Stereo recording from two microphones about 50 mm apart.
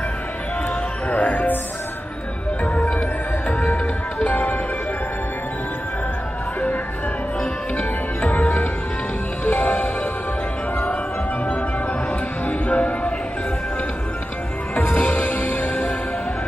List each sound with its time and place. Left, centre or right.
1.1 s music: left
2.6 s music: left
7.7 s music: left
12.1 s music: left
15.0 s music: left